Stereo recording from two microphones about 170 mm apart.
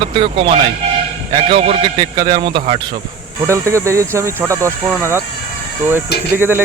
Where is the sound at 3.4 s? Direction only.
15° right (ahead or behind).